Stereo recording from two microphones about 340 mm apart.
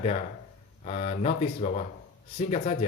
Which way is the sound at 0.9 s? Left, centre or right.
Centre.